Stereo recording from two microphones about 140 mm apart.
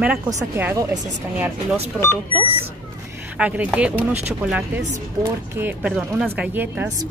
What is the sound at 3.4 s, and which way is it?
Speech, 10° right (ahead or behind).